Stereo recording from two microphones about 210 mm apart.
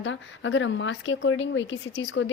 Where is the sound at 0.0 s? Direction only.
65° left (ahead or behind).